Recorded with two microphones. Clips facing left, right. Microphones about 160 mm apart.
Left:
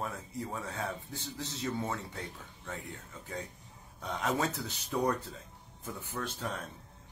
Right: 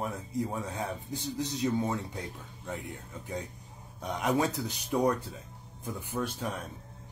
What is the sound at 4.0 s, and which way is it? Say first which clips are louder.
A man's voice: right 4 dB; 15° right (ahead or behind).